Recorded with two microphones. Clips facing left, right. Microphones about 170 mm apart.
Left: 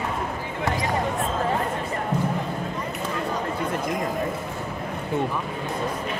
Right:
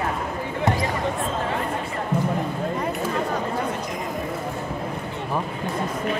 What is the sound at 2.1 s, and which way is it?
Music, 30° right (ahead or behind).